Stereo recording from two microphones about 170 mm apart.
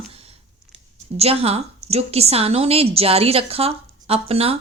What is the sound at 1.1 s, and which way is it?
A woman's voice, 35° right (ahead or behind).